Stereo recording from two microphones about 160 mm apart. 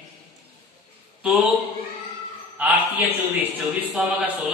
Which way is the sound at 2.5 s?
10° right (ahead or behind).